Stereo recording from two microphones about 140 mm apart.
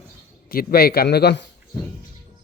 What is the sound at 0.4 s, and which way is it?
Speech, 90° left.